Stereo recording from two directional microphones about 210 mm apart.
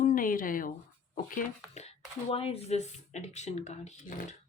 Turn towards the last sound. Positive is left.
turn(degrees=35)  # may be behind; listen again after turning